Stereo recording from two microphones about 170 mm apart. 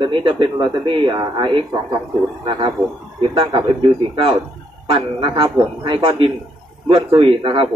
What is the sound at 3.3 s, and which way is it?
Speech, 30° right (ahead or behind).